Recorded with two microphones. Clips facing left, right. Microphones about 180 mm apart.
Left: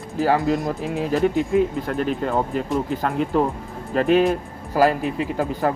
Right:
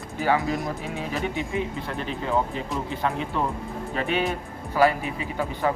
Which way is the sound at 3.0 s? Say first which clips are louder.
Left 5 dB; 40° left (ahead or behind).